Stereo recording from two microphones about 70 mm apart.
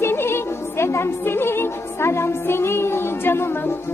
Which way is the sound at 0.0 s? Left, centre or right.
Left.